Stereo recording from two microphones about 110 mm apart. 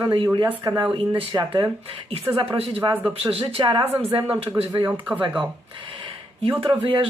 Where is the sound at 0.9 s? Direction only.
55° right (ahead or behind).